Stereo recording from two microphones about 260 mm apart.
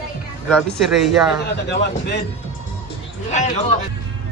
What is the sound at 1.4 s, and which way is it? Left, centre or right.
Speech, left.